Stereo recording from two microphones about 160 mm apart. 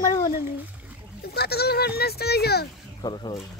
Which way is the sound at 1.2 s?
85° left.